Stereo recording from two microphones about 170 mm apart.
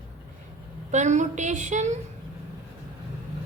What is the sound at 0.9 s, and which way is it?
A woman's voice, 45° right (ahead or behind).